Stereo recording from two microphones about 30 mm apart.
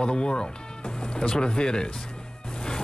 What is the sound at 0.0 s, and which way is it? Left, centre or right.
Speech, left.